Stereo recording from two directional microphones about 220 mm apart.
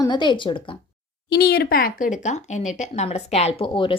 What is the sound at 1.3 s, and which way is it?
A woman's voice, 45° left (ahead or behind).